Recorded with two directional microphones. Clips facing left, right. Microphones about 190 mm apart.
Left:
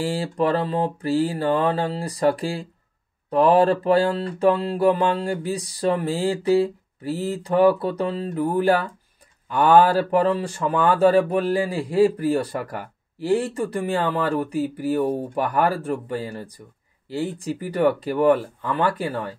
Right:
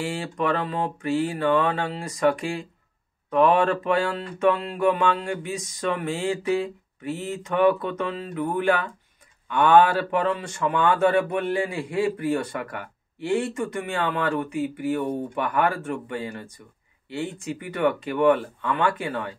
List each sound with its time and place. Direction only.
0.0 s speech: 35° left (ahead or behind)